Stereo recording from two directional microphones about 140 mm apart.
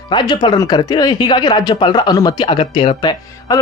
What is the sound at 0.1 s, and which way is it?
Speech, 35° left (ahead or behind).